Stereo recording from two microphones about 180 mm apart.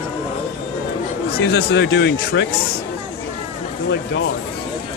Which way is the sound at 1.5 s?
70° left (ahead or behind).